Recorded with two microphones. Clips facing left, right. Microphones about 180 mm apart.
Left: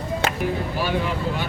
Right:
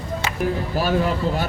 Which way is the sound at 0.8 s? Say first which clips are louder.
Right 5 dB; 40° right (ahead or behind).